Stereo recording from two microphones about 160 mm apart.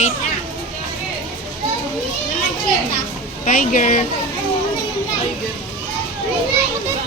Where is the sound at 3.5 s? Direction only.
60° left (ahead or behind).